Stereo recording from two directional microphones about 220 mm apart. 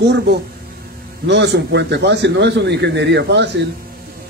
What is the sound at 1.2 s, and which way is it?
A man's voice, 50° right (ahead or behind).